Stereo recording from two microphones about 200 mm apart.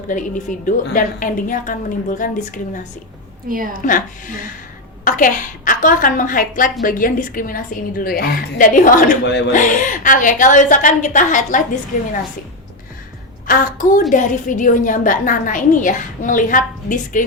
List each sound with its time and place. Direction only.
0.1 s a woman's voice: 40° left (ahead or behind)
3.5 s a woman's voice: 45° right (ahead or behind)
3.8 s a woman's voice: 40° left (ahead or behind)
13.5 s a woman's voice: 40° left (ahead or behind)